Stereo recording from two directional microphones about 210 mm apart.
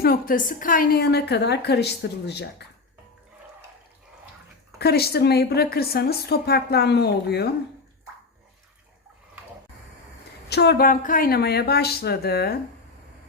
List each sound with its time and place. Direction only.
0.0 s a woman's voice: 45° left (ahead or behind)
4.8 s a woman's voice: 50° left (ahead or behind)
10.5 s a woman's voice: 50° left (ahead or behind)